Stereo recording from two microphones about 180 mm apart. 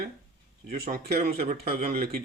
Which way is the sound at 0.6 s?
55° right (ahead or behind).